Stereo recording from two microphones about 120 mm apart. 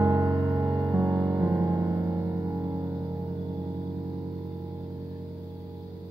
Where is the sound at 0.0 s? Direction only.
30° right (ahead or behind).